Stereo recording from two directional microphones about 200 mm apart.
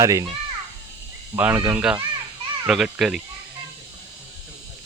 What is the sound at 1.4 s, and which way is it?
Speech, 10° right (ahead or behind).